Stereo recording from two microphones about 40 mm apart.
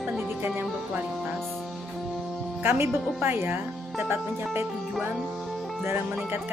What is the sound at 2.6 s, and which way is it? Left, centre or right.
Speech, right.